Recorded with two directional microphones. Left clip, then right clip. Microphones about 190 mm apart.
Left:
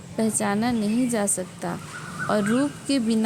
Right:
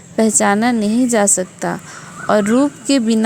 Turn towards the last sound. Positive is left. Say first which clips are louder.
# right 9 dB
turn(degrees=-40)  # may be behind; listen again after turning